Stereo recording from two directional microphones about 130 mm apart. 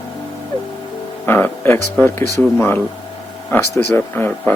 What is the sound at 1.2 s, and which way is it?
Music, 15° left (ahead or behind).